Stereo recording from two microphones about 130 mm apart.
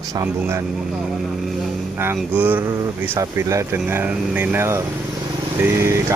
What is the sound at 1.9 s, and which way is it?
Speech, 15° right (ahead or behind).